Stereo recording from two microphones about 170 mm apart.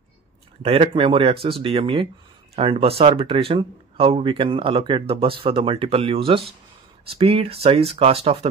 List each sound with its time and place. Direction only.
0.6 s speech: 35° right (ahead or behind)